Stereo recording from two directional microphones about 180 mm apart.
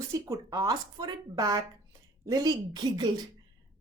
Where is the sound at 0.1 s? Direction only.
20° right (ahead or behind).